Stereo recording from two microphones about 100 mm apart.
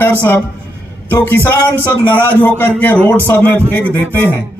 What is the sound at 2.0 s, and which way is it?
A man's voice, 15° left (ahead or behind).